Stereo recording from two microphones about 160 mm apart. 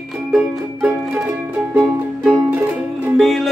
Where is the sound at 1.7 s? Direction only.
15° right (ahead or behind).